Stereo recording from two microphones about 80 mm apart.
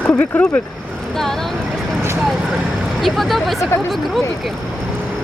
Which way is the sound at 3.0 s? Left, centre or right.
Centre.